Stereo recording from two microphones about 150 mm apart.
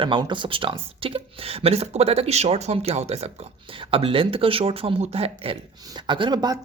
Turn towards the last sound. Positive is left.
turn(degrees=-30)  # may be behind; listen again after turning